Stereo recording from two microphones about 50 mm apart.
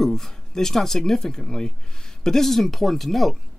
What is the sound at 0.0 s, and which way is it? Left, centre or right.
Speech, centre.